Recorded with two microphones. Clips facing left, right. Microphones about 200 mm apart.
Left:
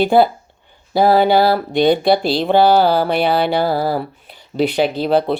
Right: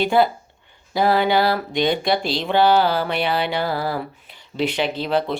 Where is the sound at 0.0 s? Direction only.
35° left (ahead or behind).